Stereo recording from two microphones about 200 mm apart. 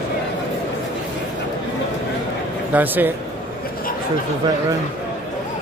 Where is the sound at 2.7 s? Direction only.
10° right (ahead or behind).